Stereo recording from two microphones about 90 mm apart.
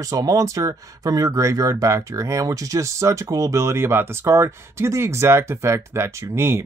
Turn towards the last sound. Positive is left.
turn(degrees=-30)  # may be behind; listen again after turning